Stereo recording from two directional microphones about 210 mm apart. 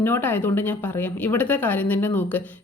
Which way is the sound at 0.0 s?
10° left (ahead or behind).